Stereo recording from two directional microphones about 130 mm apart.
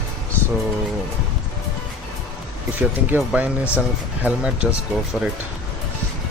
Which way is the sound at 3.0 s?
15° right (ahead or behind).